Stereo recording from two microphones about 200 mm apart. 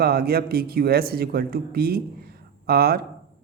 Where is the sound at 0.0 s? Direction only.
50° right (ahead or behind).